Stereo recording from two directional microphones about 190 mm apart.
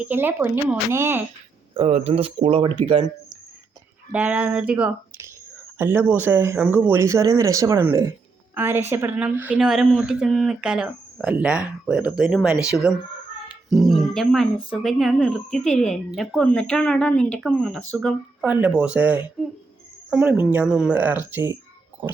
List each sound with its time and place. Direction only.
0.0 s speech: 10° right (ahead or behind)
1.7 s speech: 30° right (ahead or behind)
4.1 s a woman's voice: 10° right (ahead or behind)
13.5 s grunt: centre (ahead or behind)
14.7 s speech: centre (ahead or behind)
18.4 s speech: 10° right (ahead or behind)